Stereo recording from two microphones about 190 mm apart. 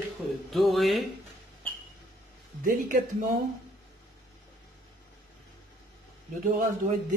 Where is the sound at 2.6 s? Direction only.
45° right (ahead or behind).